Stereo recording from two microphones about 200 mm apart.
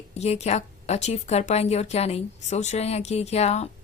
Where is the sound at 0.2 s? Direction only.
30° left (ahead or behind).